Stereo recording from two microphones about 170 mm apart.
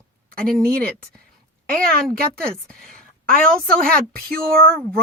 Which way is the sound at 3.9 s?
60° right (ahead or behind).